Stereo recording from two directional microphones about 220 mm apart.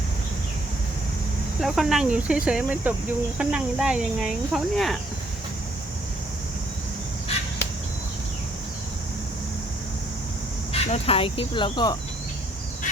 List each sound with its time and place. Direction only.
1.6 s speech: centre (ahead or behind)
10.7 s speech: 25° left (ahead or behind)